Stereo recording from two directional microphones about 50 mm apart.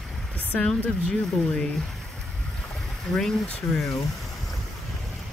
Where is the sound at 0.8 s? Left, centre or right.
Left.